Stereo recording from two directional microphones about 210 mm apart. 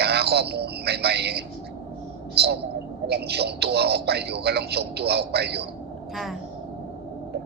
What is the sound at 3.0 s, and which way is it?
A man's voice, 50° right (ahead or behind).